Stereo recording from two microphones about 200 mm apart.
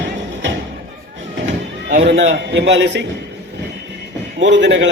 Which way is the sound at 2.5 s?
65° right (ahead or behind).